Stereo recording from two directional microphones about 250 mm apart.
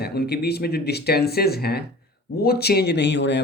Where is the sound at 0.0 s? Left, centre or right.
Left.